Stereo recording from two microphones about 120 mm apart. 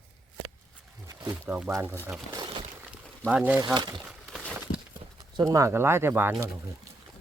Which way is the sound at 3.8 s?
40° right (ahead or behind).